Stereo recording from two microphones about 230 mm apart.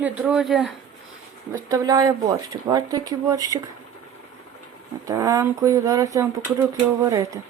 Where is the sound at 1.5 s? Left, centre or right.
Centre.